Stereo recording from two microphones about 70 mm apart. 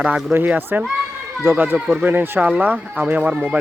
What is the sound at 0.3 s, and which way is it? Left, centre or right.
Speech, right.